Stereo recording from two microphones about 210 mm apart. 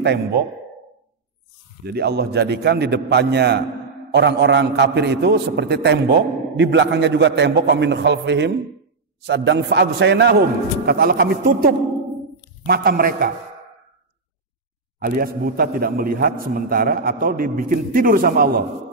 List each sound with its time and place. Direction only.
1.9 s a man's voice: 50° right (ahead or behind)
15.0 s a man's voice: 45° right (ahead or behind)